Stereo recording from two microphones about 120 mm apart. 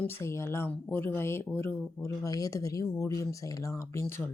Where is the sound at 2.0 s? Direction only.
30° left (ahead or behind).